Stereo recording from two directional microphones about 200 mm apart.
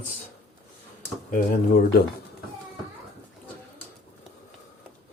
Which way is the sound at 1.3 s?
45° left (ahead or behind).